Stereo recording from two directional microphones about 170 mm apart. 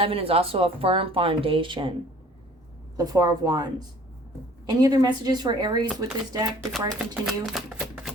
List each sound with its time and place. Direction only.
0.0 s speech: 35° right (ahead or behind)
3.0 s a woman's voice: 20° right (ahead or behind)
6.6 s speech: 5° right (ahead or behind)